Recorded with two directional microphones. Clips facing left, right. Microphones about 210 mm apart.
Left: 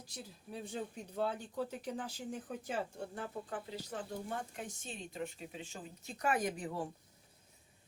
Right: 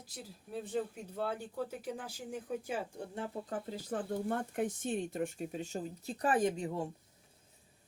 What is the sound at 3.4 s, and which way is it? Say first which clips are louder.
Speech: right 4 dB; 40° right (ahead or behind).